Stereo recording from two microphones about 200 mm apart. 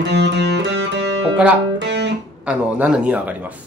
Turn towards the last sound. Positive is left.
turn(degrees=-5)  # may be behind; listen again after turning